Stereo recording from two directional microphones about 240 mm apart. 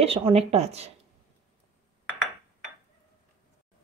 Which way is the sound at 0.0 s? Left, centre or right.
Right.